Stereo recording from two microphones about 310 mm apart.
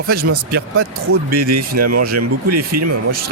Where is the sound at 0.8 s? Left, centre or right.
Right.